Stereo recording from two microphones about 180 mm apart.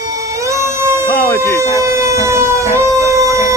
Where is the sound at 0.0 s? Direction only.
20° right (ahead or behind).